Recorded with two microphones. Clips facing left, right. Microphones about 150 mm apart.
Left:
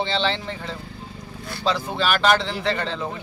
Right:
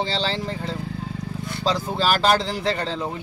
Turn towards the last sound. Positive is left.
turn(degrees=-35)  # may be behind; listen again after turning